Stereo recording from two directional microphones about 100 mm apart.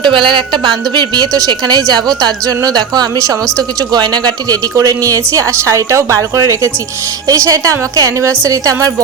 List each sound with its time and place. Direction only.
0.0 s a woman's voice: 50° right (ahead or behind); by 8.9 s 35° right (ahead or behind)